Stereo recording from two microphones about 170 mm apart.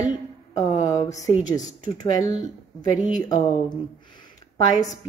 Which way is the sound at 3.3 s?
25° left (ahead or behind).